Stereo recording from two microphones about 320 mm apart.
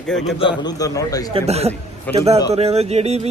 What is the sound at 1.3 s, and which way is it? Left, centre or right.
A man's voice, centre.